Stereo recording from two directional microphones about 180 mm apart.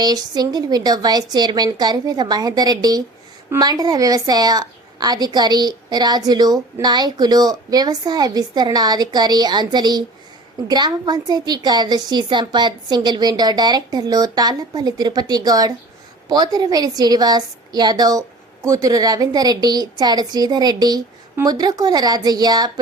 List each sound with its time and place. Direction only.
0.0 s a woman's voice: 20° right (ahead or behind)